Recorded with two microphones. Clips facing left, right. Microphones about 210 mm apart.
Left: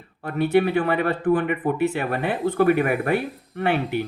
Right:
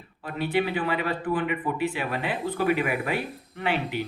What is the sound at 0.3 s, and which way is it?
Speech, 55° left (ahead or behind).